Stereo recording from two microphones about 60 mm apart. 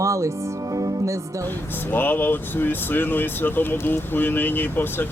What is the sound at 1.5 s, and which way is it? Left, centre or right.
Speech, left.